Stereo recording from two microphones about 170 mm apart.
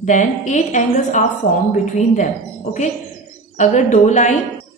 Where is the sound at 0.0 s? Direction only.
45° left (ahead or behind).